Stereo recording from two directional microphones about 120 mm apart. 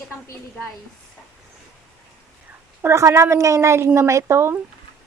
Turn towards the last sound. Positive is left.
turn(degrees=-20)  # may be behind; listen again after turning